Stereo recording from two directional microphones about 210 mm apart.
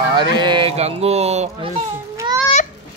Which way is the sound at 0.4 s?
20° right (ahead or behind).